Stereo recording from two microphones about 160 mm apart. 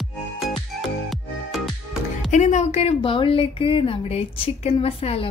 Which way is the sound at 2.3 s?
50° left (ahead or behind).